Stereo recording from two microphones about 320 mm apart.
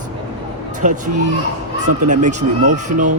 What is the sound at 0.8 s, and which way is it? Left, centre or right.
Speech, right.